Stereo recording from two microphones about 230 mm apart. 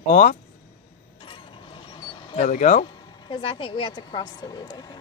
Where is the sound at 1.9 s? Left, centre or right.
Left.